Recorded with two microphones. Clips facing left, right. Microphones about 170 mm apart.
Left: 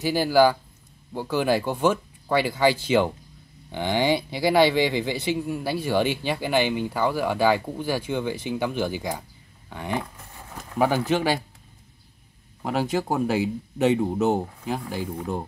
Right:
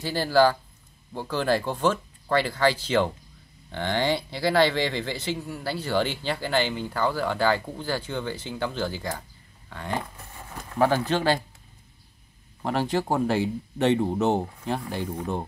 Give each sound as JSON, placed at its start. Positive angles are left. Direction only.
{"t": 0.0, "sound": "speech", "side_deg": 15}
{"t": 12.6, "sound": "speech", "side_deg": 10}